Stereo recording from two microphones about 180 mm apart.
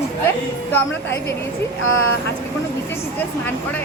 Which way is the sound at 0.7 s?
15° left (ahead or behind).